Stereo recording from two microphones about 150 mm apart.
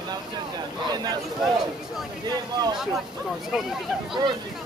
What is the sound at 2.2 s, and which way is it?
Speech, 30° right (ahead or behind).